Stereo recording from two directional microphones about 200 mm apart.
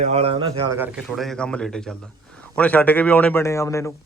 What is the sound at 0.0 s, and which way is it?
Speech, 30° right (ahead or behind).